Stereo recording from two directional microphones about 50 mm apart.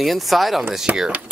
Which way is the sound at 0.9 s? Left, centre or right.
Right.